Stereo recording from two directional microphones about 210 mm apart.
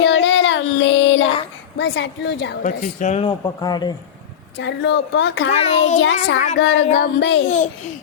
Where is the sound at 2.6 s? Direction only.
35° left (ahead or behind); by 3.9 s 20° left (ahead or behind).